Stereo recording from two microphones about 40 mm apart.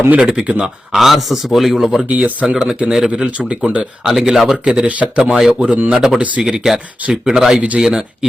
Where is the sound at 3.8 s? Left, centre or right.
Centre.